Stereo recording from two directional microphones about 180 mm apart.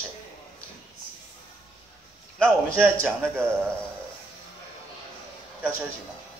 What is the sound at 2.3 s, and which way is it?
A man's voice, 5° left (ahead or behind).